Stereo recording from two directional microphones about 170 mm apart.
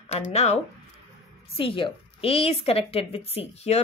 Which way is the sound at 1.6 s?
30° left (ahead or behind).